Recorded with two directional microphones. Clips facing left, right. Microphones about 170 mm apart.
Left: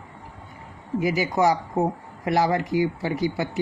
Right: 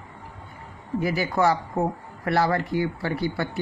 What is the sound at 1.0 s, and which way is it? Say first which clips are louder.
Speech: left 1 dB; 15° left (ahead or behind).